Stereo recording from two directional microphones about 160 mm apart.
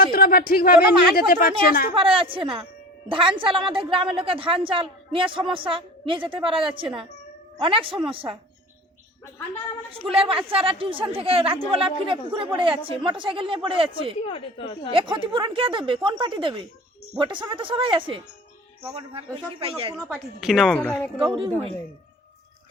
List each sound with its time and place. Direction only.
0.0 s a woman's voice: 65° left (ahead or behind)
2.0 s a woman's voice: 35° right (ahead or behind)
10.1 s a woman's voice: 35° right (ahead or behind)
20.1 s a woman's voice: 5° right (ahead or behind)
20.7 s speech: 10° left (ahead or behind)
21.2 s a woman's voice: 35° right (ahead or behind)